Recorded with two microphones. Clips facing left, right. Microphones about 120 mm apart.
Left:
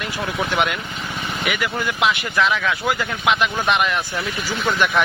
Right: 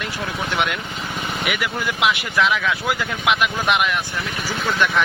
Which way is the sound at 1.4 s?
Centre (ahead or behind).